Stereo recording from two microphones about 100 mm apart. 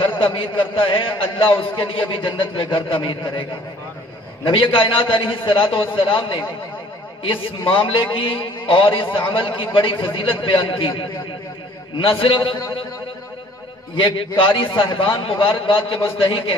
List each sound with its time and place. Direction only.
0.0 s a man's voice: 60° left (ahead or behind)
4.5 s a man's voice: 60° left (ahead or behind)
13.9 s a man's voice: 60° left (ahead or behind)